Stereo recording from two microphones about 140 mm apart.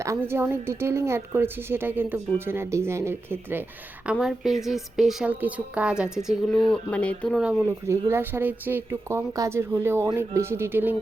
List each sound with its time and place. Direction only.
0.0 s a woman's voice: 20° right (ahead or behind); by 7.3 s 10° left (ahead or behind)
7.6 s a woman's voice: 20° right (ahead or behind)